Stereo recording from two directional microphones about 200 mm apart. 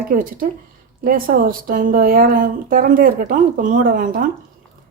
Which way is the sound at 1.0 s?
45° right (ahead or behind).